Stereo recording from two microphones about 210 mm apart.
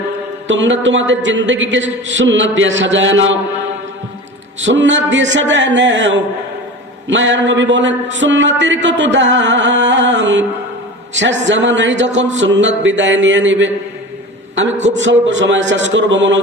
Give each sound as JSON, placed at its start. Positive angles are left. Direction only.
{"t": 0.4, "sound": "a man's voice", "side_deg": -60}
{"t": 4.7, "sound": "a man's voice", "side_deg": -60}